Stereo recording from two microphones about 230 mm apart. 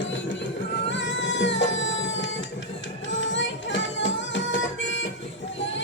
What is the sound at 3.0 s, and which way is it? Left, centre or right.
Music, left.